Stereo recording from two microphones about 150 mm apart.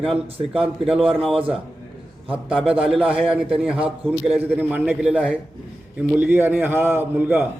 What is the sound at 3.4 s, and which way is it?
A man's voice, 10° right (ahead or behind).